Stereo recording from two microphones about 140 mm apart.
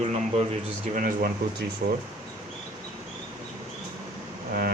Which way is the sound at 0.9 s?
80° right.